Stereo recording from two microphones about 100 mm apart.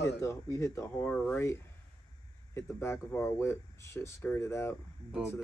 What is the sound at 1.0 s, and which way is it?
Speech, 15° left (ahead or behind).